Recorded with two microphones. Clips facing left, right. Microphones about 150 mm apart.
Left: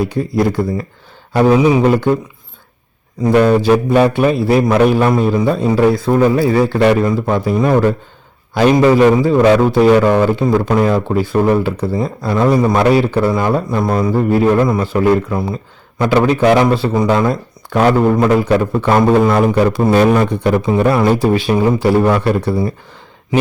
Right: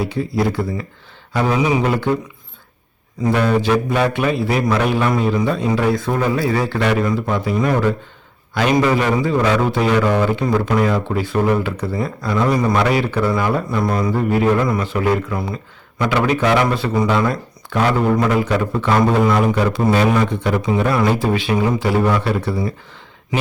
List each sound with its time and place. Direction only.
0.1 s a man's voice: 45° left (ahead or behind)
3.2 s a man's voice: 40° left (ahead or behind)